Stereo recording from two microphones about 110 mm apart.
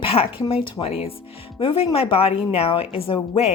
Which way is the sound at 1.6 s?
50° left (ahead or behind).